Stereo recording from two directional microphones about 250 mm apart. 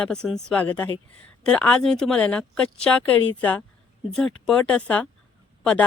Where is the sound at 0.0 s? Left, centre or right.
Centre.